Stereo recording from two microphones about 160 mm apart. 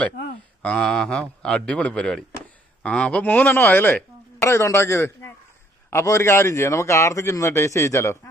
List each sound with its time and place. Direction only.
0.6 s speech: 5° left (ahead or behind)